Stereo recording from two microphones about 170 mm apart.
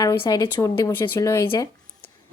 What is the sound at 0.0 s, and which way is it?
Speech, 20° left (ahead or behind).